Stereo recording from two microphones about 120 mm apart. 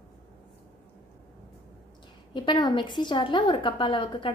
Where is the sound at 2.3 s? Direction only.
40° left (ahead or behind).